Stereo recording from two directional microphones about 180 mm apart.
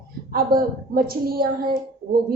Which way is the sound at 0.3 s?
55° right (ahead or behind).